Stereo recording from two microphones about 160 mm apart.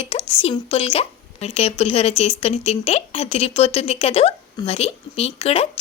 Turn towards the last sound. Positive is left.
turn(degrees=40)  # may be behind; listen again after turning